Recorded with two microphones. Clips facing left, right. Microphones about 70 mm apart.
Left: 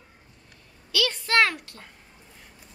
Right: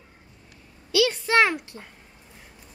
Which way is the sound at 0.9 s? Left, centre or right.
Centre.